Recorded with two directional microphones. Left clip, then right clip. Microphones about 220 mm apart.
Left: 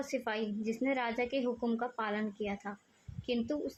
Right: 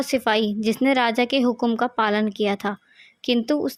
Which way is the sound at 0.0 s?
45° right (ahead or behind).